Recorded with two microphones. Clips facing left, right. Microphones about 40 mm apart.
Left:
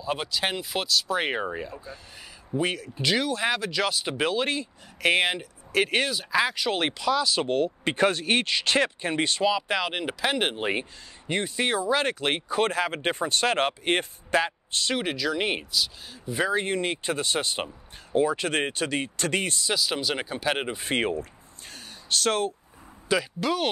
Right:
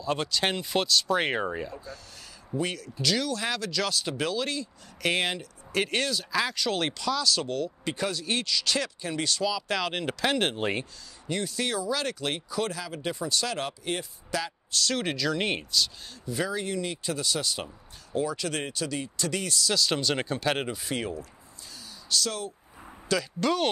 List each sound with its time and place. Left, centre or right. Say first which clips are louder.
0.0 s speech: even; centre
2.5 s speech: left 3 dB; left
5.1 s speech: left 4 dB; centre
9.7 s speech: left 2 dB; centre
11.2 s speech: left 4 dB; left
15.0 s speech: left 1 dB; centre
16.3 s speech: left 4 dB; left
19.7 s speech: right 1 dB; centre
20.7 s speech: left 6 dB; left
23.1 s speech: left 3 dB; left
23.4 s speech: even; centre